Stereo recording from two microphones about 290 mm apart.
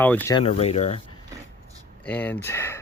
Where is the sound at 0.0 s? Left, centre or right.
Centre.